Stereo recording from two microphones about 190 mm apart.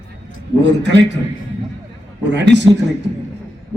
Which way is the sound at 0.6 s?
65° right (ahead or behind).